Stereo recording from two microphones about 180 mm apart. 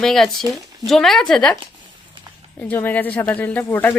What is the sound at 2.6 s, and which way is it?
Speech, 10° left (ahead or behind).